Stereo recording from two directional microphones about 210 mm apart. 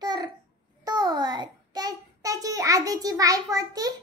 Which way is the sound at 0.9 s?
20° right (ahead or behind).